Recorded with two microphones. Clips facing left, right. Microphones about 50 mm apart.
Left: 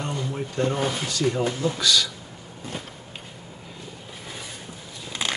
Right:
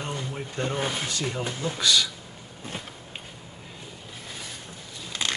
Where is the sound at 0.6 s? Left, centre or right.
Centre.